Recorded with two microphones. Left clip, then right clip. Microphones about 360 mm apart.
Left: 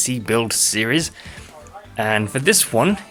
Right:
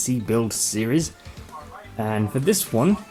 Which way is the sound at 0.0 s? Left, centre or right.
Left.